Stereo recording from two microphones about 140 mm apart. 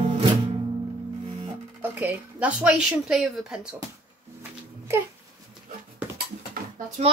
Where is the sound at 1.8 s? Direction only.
10° right (ahead or behind).